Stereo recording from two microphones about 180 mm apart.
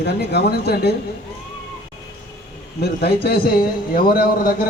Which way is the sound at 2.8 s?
60° left (ahead or behind).